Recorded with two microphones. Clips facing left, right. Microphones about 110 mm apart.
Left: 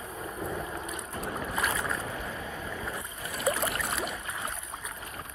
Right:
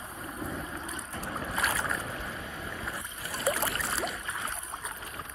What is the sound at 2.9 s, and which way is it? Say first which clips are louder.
Boat: left 1 dB; 30° right (ahead or behind).